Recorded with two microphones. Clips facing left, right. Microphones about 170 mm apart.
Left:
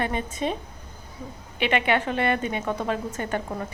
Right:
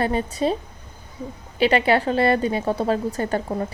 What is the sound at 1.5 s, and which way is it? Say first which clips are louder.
A woman's voice: right 5 dB; 35° right (ahead or behind).